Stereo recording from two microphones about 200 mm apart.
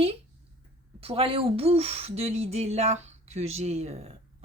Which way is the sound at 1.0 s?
30° right (ahead or behind).